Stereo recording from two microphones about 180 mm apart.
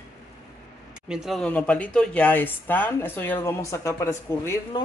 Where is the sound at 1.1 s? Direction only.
Centre (ahead or behind); by 4.8 s 15° left (ahead or behind).